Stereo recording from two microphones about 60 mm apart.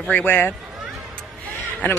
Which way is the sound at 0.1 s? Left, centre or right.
Left.